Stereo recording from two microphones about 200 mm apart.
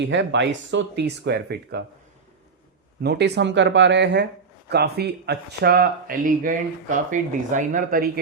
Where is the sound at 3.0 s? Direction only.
55° right (ahead or behind).